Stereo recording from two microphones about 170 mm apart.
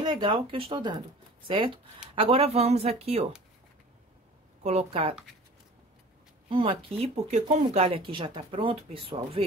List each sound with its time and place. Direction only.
0.0 s speech: 30° right (ahead or behind)
2.1 s speech: 35° right (ahead or behind)
4.6 s speech: 35° right (ahead or behind)
6.5 s speech: 30° right (ahead or behind)